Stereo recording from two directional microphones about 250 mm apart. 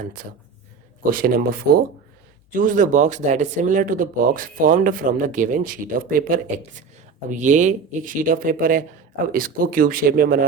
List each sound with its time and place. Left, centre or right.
1.1 s speech: right